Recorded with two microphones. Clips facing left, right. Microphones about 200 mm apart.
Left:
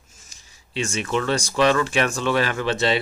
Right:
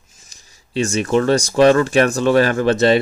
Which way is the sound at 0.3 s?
40° right (ahead or behind).